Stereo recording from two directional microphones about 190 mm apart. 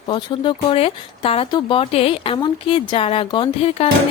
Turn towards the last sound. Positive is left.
turn(degrees=30)  # may be behind; listen again after turning